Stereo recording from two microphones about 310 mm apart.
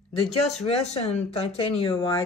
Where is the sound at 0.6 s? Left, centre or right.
Centre.